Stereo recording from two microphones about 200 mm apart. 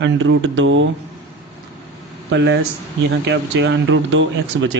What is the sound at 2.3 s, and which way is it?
Speech, 60° right (ahead or behind).